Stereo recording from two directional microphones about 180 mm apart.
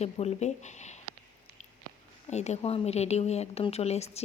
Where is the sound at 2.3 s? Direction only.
40° left (ahead or behind).